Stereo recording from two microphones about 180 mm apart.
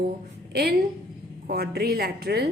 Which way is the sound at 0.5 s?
60° right (ahead or behind).